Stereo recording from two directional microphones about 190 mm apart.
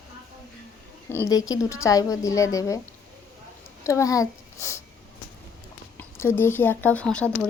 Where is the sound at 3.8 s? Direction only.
15° left (ahead or behind).